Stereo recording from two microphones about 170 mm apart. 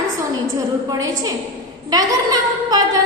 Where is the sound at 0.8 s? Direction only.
20° right (ahead or behind).